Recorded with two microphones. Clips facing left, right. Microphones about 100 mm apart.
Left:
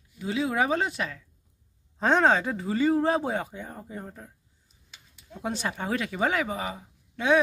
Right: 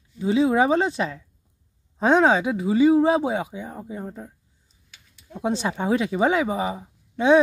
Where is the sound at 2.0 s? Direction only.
10° right (ahead or behind).